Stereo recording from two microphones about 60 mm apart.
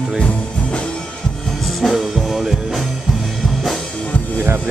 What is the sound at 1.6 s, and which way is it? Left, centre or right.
Music, centre.